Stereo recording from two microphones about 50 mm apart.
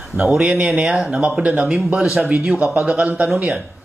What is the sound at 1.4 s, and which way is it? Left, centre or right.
Speech, right.